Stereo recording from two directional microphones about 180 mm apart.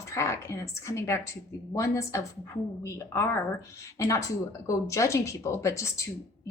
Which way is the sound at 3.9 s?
15° left (ahead or behind).